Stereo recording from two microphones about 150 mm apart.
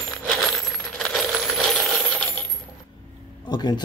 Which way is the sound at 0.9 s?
Centre (ahead or behind).